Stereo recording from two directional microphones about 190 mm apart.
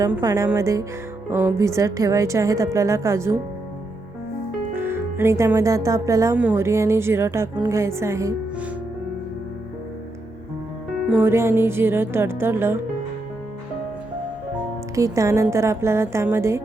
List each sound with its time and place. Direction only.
0.2 s speech: 20° right (ahead or behind)
4.7 s speech: 10° right (ahead or behind)
11.2 s speech: 15° right (ahead or behind)
14.9 s speech: 15° right (ahead or behind)